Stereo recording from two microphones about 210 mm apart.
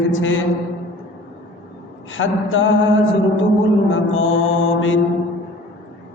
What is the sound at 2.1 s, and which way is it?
Speech, 70° left (ahead or behind).